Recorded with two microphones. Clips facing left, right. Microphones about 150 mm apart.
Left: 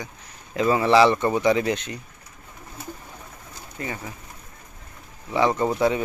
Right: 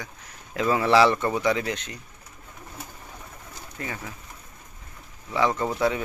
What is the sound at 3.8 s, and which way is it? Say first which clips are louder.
Speech: left 3 dB; 15° left (ahead or behind).